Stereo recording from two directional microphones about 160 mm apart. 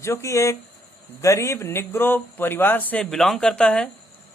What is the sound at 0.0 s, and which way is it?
Speech, 20° left (ahead or behind).